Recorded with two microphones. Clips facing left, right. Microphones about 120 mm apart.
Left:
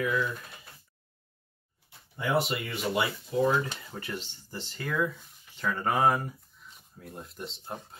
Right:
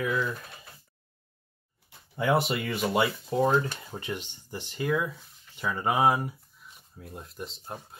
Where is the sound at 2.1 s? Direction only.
60° right (ahead or behind).